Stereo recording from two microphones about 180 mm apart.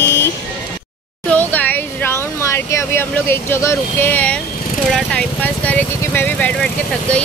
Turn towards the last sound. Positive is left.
turn(degrees=5)  # may be behind; listen again after turning